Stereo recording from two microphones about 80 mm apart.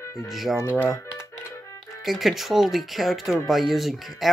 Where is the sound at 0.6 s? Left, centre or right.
Left.